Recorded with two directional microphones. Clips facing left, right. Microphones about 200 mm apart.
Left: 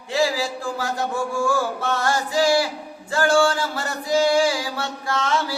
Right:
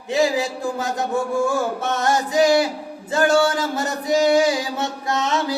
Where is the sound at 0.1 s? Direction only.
20° right (ahead or behind).